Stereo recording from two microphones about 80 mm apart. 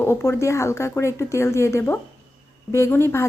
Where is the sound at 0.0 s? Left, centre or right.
Left.